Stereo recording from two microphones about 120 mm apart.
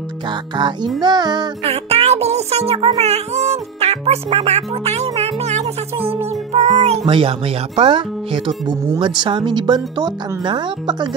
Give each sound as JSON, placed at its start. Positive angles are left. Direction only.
{"t": 1.0, "sound": "speech", "side_deg": -35}
{"t": 1.6, "sound": "music", "side_deg": -55}
{"t": 3.0, "sound": "speech", "side_deg": -65}
{"t": 6.5, "sound": "music", "side_deg": -70}
{"t": 7.1, "sound": "speech", "side_deg": -50}